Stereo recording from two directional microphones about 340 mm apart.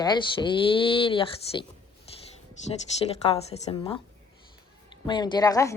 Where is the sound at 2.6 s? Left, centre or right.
Centre.